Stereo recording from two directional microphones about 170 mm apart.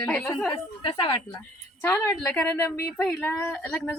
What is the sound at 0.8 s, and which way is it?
Speech, 30° left (ahead or behind).